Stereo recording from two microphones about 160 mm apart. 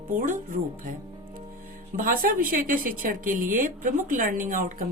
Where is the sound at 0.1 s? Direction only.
55° right (ahead or behind).